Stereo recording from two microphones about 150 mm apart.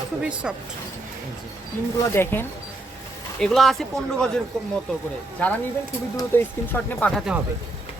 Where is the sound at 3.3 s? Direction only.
5° left (ahead or behind).